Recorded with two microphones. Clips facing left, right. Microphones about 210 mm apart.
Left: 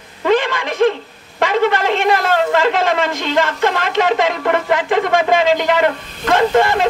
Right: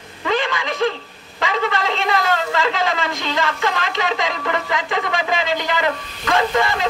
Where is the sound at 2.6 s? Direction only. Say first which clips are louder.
Left 5 dB; 55° left (ahead or behind).